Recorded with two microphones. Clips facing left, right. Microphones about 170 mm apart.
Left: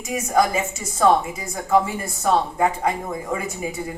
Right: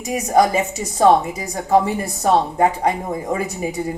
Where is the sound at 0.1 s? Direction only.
35° right (ahead or behind).